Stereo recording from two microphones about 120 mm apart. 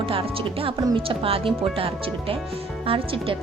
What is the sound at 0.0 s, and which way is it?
Speech, 50° right (ahead or behind).